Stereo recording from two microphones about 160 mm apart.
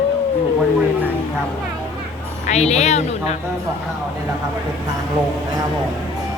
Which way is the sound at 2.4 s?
45° left (ahead or behind).